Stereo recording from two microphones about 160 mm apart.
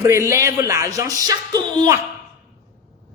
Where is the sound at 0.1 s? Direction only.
20° right (ahead or behind).